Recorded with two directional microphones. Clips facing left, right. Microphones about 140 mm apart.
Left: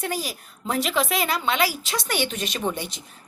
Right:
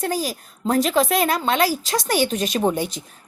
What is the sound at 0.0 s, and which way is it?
A woman's voice, 40° right (ahead or behind).